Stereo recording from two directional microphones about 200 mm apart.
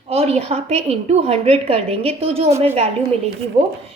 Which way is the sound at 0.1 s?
30° right (ahead or behind).